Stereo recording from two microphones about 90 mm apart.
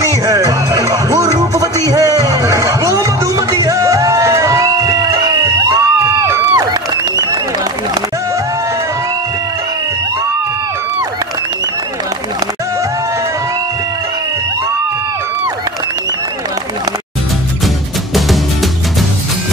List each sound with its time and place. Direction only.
0.0 s music: 40° right (ahead or behind)
6.5 s a sound: 45° right (ahead or behind)
18.1 s music: centre (ahead or behind)